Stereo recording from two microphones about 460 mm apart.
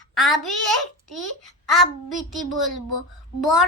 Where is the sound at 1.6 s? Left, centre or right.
Centre.